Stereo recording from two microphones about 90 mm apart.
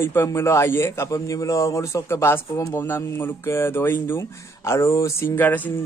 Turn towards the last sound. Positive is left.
turn(degrees=20)  # may be behind; listen again after turning